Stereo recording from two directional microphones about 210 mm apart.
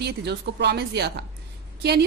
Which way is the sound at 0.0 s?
55° right (ahead or behind).